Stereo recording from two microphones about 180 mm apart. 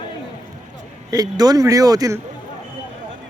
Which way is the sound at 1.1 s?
20° right (ahead or behind).